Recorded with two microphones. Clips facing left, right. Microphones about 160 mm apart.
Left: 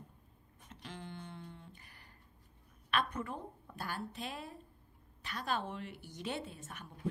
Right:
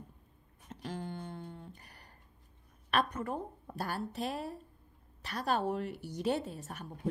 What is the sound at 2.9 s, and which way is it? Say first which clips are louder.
A woman's voice: right 4 dB; 40° right (ahead or behind).